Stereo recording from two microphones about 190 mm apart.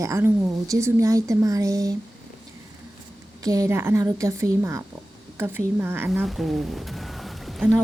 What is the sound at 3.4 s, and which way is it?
A woman's voice, 15° right (ahead or behind).